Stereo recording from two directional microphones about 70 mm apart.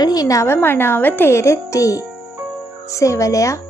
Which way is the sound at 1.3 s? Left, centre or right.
Left.